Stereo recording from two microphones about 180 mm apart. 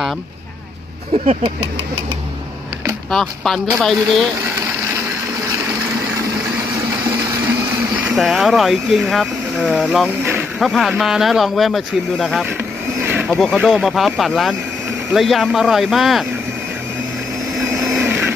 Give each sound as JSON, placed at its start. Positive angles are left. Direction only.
{"t": 1.2, "sound": "a sound", "side_deg": -40}
{"t": 3.1, "sound": "speech", "side_deg": 0}
{"t": 8.0, "sound": "speech", "side_deg": 0}
{"t": 10.0, "sound": "speech", "side_deg": -10}
{"t": 10.6, "sound": "speech", "side_deg": 0}
{"t": 12.4, "sound": "vehicle", "side_deg": -10}
{"t": 13.3, "sound": "speech", "side_deg": 0}
{"t": 17.7, "sound": "blender", "side_deg": 0}
{"t": 18.0, "sound": "blender", "side_deg": -10}